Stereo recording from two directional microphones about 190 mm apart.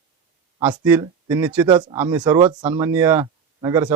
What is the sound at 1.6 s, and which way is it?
Speech, 25° right (ahead or behind).